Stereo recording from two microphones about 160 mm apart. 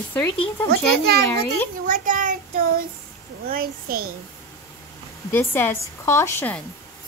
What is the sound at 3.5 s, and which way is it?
Speech, 65° right (ahead or behind).